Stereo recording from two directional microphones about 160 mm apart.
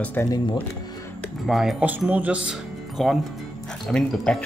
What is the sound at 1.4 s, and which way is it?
Speech, centre (ahead or behind).